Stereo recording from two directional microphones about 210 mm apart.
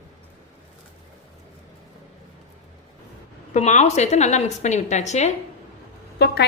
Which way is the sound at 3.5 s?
35° left (ahead or behind).